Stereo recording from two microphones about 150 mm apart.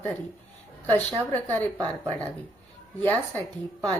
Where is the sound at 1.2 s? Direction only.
10° left (ahead or behind).